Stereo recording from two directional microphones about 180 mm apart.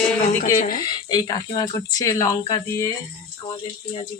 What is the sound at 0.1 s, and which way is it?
Speech, 15° left (ahead or behind).